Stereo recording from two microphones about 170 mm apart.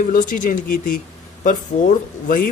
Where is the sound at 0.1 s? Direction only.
55° left (ahead or behind).